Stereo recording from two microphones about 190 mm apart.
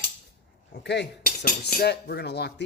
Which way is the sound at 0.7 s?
65° left (ahead or behind).